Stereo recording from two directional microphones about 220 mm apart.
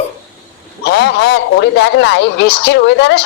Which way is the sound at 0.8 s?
50° left (ahead or behind).